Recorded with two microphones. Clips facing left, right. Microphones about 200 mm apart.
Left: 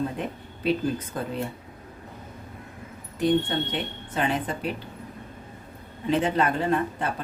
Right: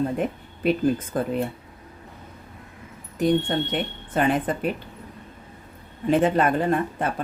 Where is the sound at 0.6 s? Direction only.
50° right (ahead or behind).